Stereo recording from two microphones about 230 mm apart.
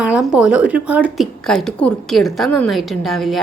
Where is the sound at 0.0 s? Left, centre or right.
Centre.